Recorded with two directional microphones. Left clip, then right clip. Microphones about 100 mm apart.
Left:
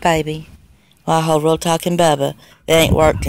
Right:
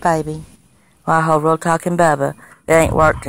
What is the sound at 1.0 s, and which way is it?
Speech, centre (ahead or behind).